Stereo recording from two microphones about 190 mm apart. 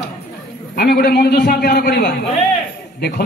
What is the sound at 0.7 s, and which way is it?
Speech, 55° left (ahead or behind).